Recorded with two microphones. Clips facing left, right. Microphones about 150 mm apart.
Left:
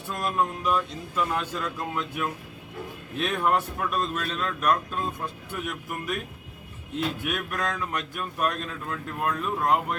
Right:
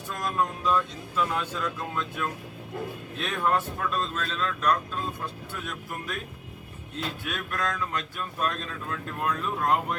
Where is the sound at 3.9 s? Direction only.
15° left (ahead or behind).